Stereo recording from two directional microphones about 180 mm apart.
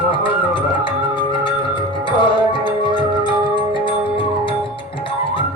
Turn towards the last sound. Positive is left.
turn(degrees=25)  # may be behind; listen again after turning